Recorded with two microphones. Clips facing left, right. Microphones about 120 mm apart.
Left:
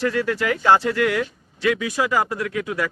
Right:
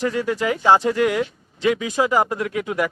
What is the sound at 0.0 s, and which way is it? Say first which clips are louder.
Speech: even; 15° right (ahead or behind).